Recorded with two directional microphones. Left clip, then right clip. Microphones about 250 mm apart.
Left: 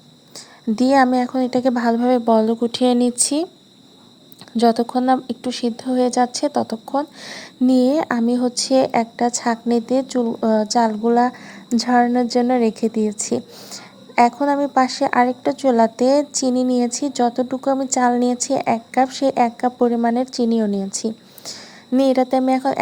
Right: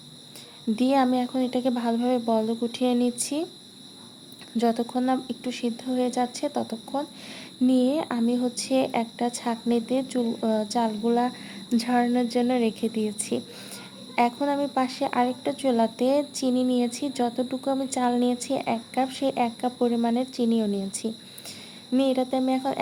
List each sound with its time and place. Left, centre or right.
0.8 s a woman's voice: left
4.5 s a woman's voice: left